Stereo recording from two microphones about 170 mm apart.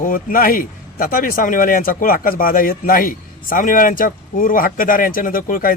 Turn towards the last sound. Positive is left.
turn(degrees=55)  # may be behind; listen again after turning